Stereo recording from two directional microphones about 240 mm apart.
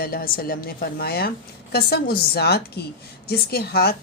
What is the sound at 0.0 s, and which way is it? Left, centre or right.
Speech, left.